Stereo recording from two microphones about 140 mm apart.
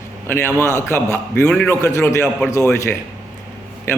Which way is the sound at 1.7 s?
20° left (ahead or behind).